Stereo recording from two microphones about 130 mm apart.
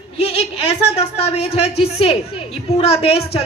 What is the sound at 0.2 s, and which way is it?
A woman's voice, 50° left (ahead or behind).